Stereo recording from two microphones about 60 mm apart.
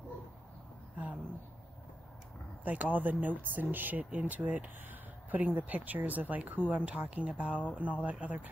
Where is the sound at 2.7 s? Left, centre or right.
Right.